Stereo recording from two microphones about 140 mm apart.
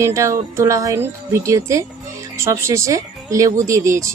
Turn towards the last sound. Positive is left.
turn(degrees=-20)  # may be behind; listen again after turning